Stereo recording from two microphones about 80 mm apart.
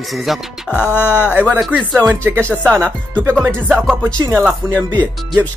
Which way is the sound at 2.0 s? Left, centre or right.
Right.